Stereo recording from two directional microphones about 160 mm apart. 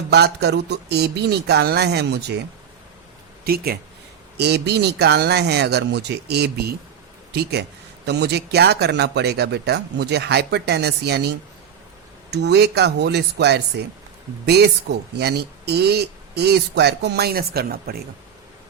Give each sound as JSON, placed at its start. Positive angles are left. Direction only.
{"t": 0.1, "sound": "speech", "side_deg": -90}
{"t": 3.4, "sound": "speech", "side_deg": -70}
{"t": 4.4, "sound": "speech", "side_deg": -90}
{"t": 8.0, "sound": "speech", "side_deg": -90}
{"t": 12.3, "sound": "speech", "side_deg": -90}